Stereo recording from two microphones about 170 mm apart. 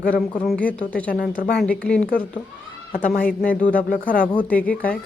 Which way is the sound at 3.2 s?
10° left (ahead or behind).